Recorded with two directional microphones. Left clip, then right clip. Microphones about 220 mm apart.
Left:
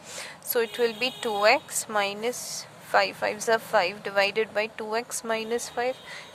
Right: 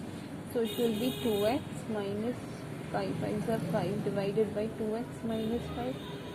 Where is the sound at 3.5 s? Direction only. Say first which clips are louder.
Left 11 dB; 35° left (ahead or behind).